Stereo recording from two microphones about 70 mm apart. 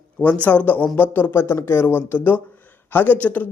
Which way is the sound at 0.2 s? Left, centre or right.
Left.